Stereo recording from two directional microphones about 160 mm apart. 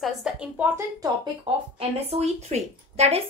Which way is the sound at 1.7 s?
40° right (ahead or behind).